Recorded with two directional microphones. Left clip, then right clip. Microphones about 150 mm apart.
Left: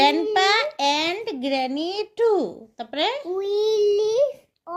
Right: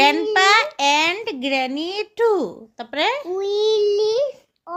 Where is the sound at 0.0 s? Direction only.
45° right (ahead or behind).